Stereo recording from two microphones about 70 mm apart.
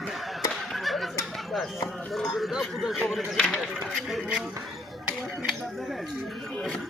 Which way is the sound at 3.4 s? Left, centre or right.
Centre.